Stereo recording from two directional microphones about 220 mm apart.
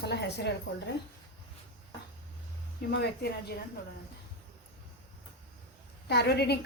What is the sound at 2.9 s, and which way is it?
Speech, 50° left (ahead or behind).